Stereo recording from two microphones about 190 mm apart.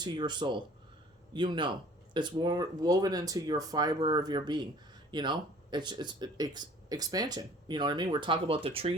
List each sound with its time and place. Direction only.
0.0 s speech: 25° right (ahead or behind)